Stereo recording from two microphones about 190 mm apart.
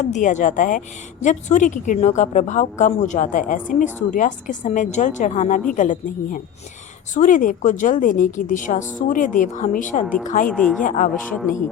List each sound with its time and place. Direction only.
0.0 s a woman's voice: 40° left (ahead or behind)
10.5 s speech: 5° left (ahead or behind)
10.8 s a woman's voice: 45° left (ahead or behind)
11.1 s speech: centre (ahead or behind)